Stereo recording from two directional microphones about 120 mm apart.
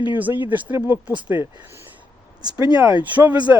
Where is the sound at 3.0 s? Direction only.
15° right (ahead or behind).